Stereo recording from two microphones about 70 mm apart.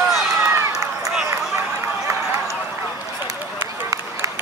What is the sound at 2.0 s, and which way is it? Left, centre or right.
Run, right.